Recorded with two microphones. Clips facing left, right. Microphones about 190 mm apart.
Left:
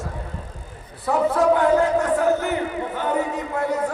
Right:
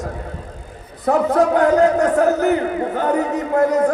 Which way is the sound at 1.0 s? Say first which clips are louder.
Right 3 dB; 40° right (ahead or behind).